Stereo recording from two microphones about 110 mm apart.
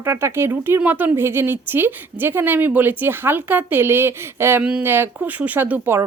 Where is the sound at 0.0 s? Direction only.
25° right (ahead or behind).